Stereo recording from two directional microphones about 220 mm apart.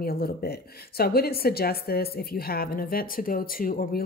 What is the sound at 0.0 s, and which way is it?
A woman's voice, 45° left (ahead or behind).